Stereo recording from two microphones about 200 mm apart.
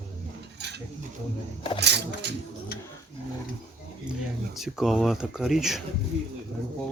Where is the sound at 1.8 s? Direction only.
55° right (ahead or behind).